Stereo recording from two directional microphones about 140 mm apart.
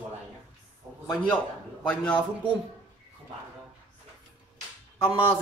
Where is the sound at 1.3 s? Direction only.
10° left (ahead or behind).